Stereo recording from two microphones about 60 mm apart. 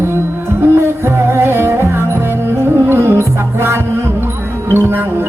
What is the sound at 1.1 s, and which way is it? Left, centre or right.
Music, right.